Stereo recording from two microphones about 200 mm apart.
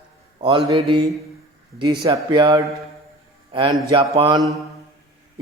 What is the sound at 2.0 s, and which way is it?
A man's voice, 20° right (ahead or behind).